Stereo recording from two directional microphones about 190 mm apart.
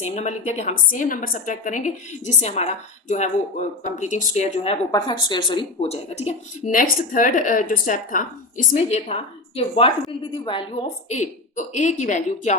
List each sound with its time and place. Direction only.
0.0 s speech: 40° left (ahead or behind)
4.9 s speech: 20° left (ahead or behind); by 12.5 s 40° left (ahead or behind)